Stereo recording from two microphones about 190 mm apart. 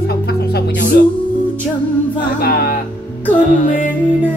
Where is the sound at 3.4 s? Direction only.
45° left (ahead or behind).